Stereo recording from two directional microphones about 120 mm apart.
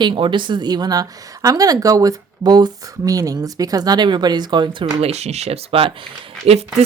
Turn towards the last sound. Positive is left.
turn(degrees=-60)  # may be behind; listen again after turning